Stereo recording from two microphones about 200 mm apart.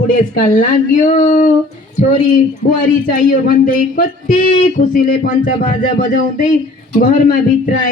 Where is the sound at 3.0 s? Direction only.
45° left (ahead or behind).